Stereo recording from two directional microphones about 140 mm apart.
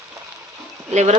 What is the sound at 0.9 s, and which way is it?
Speech, 55° right (ahead or behind).